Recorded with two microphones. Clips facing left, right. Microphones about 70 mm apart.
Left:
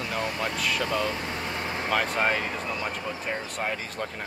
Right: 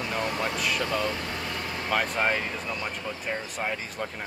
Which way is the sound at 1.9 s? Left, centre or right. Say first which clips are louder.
Even; centre.